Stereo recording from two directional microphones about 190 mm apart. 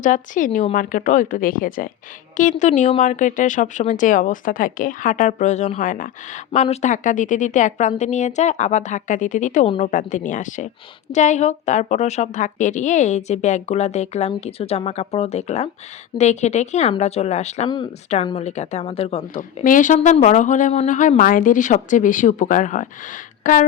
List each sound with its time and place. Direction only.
0.0 s speech: 45° left (ahead or behind)
9.6 s a woman's voice: 30° left (ahead or behind)
9.9 s speech: 40° left (ahead or behind)
19.4 s speech: 45° left (ahead or behind)